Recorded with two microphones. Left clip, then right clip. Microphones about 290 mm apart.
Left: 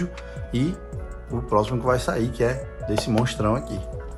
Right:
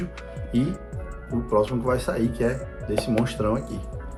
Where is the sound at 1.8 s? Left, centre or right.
Left.